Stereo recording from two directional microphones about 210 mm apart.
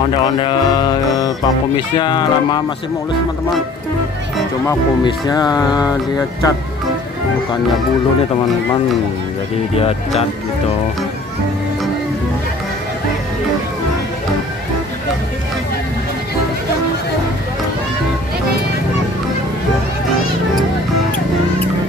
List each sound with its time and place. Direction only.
0.2 s music: 20° left (ahead or behind)
4.6 s speech: 20° left (ahead or behind)
9.8 s music: 30° left (ahead or behind)